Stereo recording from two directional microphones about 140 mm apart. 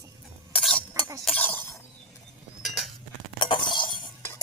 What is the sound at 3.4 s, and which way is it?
Chink, 35° left (ahead or behind).